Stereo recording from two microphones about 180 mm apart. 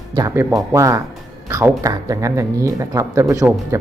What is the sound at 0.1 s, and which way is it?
Speech, 20° right (ahead or behind).